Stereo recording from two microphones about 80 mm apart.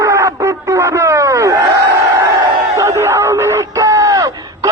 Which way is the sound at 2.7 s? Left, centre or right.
Right.